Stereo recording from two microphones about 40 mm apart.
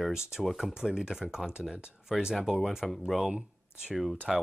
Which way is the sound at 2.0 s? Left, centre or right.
Centre.